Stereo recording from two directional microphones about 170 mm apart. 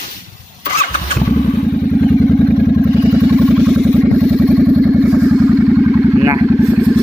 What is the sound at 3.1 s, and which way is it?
Vehicle, centre (ahead or behind).